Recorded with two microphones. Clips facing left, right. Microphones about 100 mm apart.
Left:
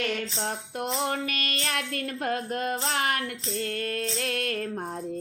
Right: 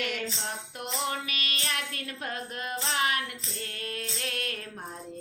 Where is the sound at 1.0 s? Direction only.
45° left (ahead or behind).